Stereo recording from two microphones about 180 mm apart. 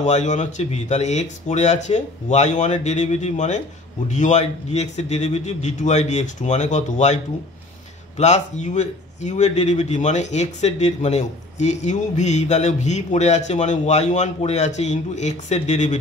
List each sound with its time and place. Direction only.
0.0 s speech: 40° left (ahead or behind)
8.2 s speech: 40° left (ahead or behind)